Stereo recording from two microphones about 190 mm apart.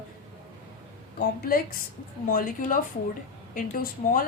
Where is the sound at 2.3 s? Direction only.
50° left (ahead or behind).